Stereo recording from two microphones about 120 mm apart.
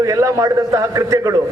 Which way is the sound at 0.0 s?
25° right (ahead or behind).